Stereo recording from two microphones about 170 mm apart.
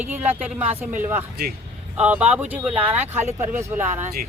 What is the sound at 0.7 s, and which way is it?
Speech, 40° right (ahead or behind).